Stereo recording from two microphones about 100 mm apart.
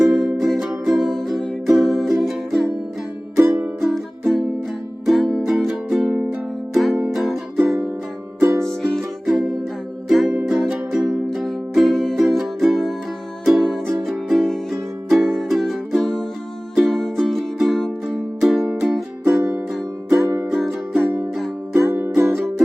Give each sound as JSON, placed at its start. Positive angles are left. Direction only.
{"t": 0.0, "sound": "music", "side_deg": 0}
{"t": 3.3, "sound": "music", "side_deg": -25}
{"t": 3.8, "sound": "music", "side_deg": 0}
{"t": 8.4, "sound": "music", "side_deg": -25}
{"t": 8.6, "sound": "music", "side_deg": 5}
{"t": 20.2, "sound": "music", "side_deg": -30}
{"t": 20.5, "sound": "music", "side_deg": 0}
{"t": 21.8, "sound": "music", "side_deg": -25}